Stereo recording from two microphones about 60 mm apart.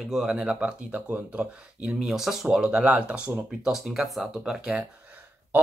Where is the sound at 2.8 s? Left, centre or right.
Right.